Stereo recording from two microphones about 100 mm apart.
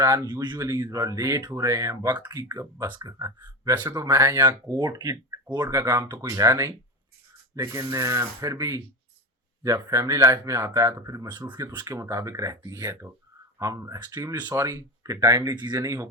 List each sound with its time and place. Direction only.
0.0 s speech: 35° right (ahead or behind)
2.1 s speech: 45° right (ahead or behind)
11.3 s speech: 45° right (ahead or behind)
11.9 s speech: 30° right (ahead or behind)